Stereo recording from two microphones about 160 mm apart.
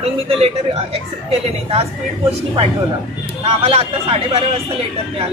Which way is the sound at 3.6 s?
40° right (ahead or behind).